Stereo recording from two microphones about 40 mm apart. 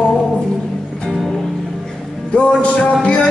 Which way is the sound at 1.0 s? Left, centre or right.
Centre.